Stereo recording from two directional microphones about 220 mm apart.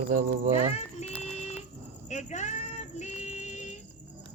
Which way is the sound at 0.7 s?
30° left (ahead or behind).